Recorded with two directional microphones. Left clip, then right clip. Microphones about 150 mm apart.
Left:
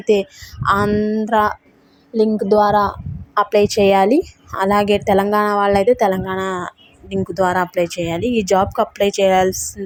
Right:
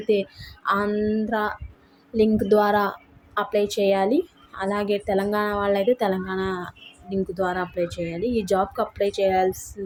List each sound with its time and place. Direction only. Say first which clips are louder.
0.1 s a woman's voice: left 7 dB; 50° left (ahead or behind)
2.1 s a woman's voice: left 5 dB; 35° left (ahead or behind)
3.3 s a woman's voice: left 8 dB; 60° left (ahead or behind)
7.4 s a woman's voice: left 11 dB; 65° left (ahead or behind)
8.4 s a woman's voice: left 7 dB; 45° left (ahead or behind)
9.5 s a woman's voice: left 6 dB; 30° left (ahead or behind)